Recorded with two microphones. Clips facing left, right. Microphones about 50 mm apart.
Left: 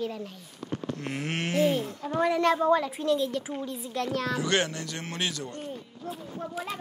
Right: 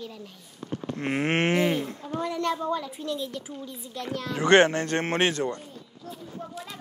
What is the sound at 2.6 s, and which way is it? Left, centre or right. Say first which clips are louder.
Speech: left 6 dB; left.